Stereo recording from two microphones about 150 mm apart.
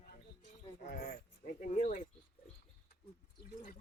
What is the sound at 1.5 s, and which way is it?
Speech, 60° left (ahead or behind).